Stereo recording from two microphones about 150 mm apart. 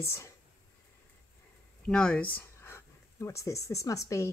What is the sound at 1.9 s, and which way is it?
Speech, 5° left (ahead or behind).